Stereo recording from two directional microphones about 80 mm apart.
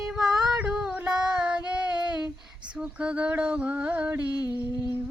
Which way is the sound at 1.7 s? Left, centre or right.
Centre.